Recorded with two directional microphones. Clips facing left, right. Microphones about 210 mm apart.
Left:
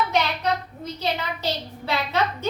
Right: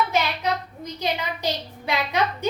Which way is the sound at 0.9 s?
15° right (ahead or behind).